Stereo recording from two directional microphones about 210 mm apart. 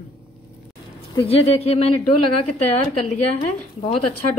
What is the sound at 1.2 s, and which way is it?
Speech, 30° left (ahead or behind).